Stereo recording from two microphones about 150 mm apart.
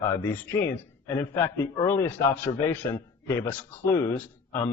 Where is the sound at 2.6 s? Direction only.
15° left (ahead or behind).